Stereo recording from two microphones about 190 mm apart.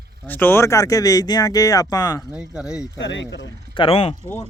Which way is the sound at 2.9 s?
70° left (ahead or behind).